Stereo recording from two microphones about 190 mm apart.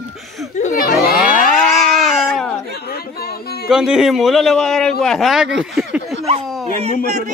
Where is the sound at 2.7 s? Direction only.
55° left (ahead or behind).